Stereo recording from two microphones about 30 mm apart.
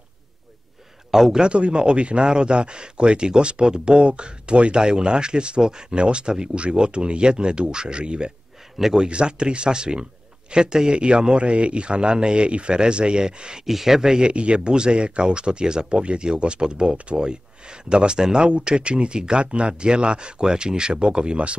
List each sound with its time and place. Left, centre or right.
1.1 s a man's voice: centre
1.4 s speech: right
6.5 s speech: right
13.7 s speech: centre
14.3 s speech: right